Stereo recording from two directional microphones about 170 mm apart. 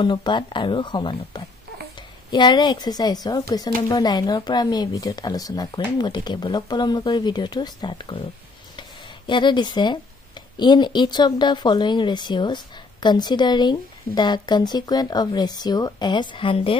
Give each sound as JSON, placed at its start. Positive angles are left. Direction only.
{"t": 0.0, "sound": "speech", "side_deg": 25}
{"t": 9.3, "sound": "speech", "side_deg": 25}